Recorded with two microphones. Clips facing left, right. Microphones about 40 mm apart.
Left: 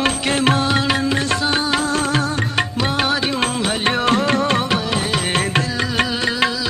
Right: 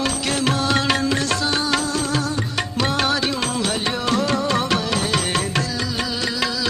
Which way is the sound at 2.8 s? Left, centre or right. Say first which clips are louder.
Right 1 dB; centre.